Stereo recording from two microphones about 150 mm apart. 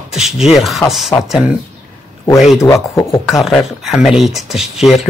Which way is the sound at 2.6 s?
20° left (ahead or behind).